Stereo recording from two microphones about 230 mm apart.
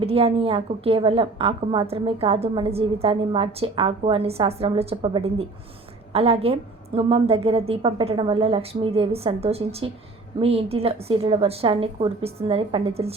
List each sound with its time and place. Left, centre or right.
0.0 s a woman's voice: right